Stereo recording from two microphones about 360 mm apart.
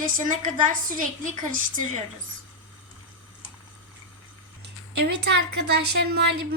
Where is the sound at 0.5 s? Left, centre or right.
Right.